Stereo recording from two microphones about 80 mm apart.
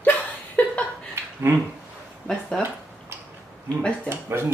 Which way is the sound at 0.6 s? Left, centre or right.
Left.